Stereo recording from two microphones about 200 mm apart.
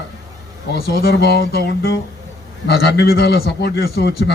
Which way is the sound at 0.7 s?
50° left (ahead or behind).